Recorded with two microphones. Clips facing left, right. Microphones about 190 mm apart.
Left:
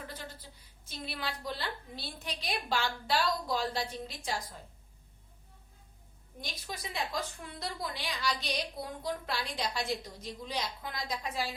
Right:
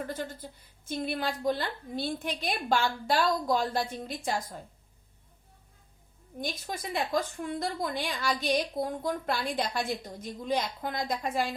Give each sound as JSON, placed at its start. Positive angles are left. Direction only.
{"t": 0.0, "sound": "a woman's voice", "side_deg": -50}
{"t": 6.4, "sound": "a woman's voice", "side_deg": -50}